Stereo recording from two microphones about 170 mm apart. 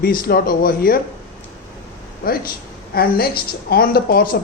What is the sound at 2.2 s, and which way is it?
Speech, 60° left (ahead or behind).